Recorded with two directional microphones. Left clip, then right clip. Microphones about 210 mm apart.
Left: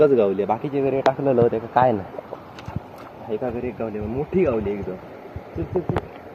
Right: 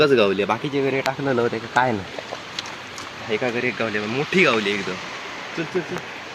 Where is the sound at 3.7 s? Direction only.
65° right (ahead or behind).